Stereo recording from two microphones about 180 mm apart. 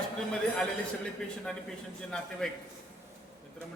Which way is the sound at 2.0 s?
5° left (ahead or behind).